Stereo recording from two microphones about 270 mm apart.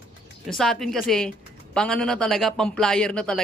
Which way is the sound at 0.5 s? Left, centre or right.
Centre.